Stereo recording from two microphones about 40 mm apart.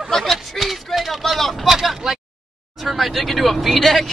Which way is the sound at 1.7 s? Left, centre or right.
Centre.